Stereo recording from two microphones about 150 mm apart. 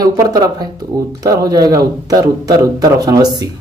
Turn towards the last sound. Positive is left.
turn(degrees=-25)  # may be behind; listen again after turning